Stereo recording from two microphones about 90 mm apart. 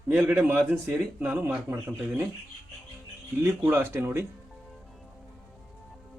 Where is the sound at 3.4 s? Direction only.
25° right (ahead or behind).